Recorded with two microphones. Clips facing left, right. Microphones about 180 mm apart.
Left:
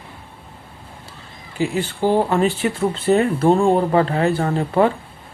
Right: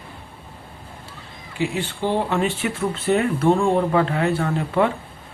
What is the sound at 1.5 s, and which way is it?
Speech, 40° left (ahead or behind).